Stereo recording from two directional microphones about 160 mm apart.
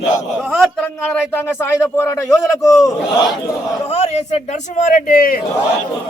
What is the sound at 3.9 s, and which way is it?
A man's voice, 45° left (ahead or behind).